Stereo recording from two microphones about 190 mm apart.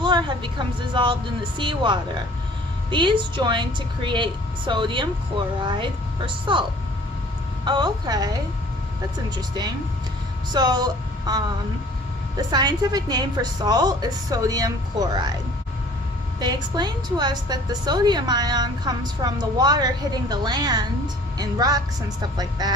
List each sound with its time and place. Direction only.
0.0 s a woman's voice: 25° right (ahead or behind)
10.5 s a woman's voice: 20° right (ahead or behind)
16.4 s a woman's voice: 20° right (ahead or behind)